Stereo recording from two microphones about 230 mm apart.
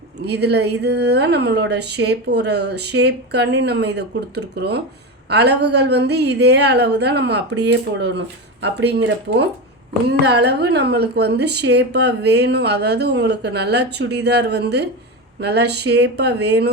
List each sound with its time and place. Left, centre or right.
0.2 s speech: right